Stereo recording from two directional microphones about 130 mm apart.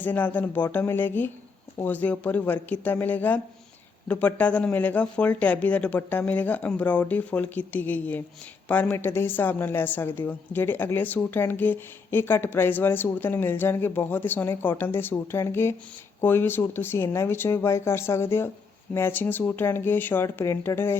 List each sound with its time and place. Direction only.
0.0 s a woman's voice: 15° left (ahead or behind)